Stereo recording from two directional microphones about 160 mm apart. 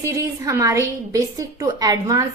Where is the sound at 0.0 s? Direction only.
20° right (ahead or behind).